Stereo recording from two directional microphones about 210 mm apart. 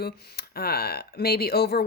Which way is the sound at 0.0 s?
50° left (ahead or behind).